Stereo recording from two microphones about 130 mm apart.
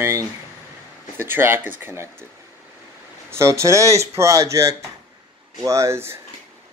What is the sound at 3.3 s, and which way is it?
Speech, 20° right (ahead or behind).